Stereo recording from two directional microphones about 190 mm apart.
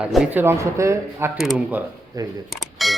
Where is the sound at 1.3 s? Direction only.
5° right (ahead or behind).